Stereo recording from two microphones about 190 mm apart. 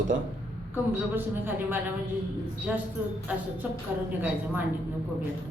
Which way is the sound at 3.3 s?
5° right (ahead or behind).